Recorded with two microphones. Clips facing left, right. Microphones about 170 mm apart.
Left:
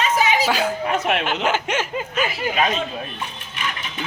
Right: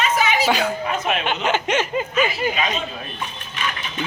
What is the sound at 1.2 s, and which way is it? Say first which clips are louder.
Speech: even; 5° left (ahead or behind).